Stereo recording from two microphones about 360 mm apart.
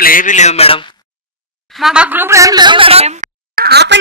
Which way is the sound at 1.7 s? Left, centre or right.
Centre.